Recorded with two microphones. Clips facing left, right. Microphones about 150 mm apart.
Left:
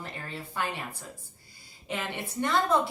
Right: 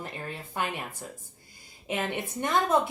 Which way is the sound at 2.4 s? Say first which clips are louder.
Even; 15° right (ahead or behind).